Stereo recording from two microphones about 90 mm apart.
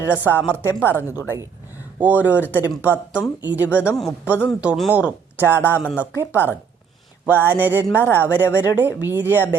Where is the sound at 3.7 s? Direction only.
20° left (ahead or behind).